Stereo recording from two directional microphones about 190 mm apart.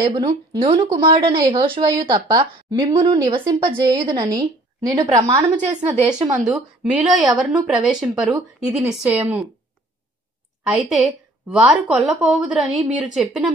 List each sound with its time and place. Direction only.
0.0 s a woman's voice: 20° right (ahead or behind)
6.3 s a woman's voice: 5° right (ahead or behind)
11.5 s a woman's voice: centre (ahead or behind)